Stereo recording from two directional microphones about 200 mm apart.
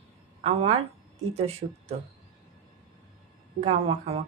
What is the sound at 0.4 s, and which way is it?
Speech, 30° right (ahead or behind).